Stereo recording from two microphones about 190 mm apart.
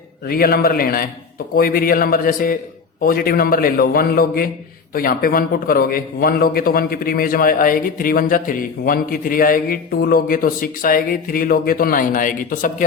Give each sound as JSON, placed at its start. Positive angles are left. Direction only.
{"t": 0.3, "sound": "a man's voice", "side_deg": 50}